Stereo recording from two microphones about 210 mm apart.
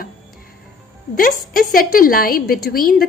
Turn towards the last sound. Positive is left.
turn(degrees=45)  # may be behind; listen again after turning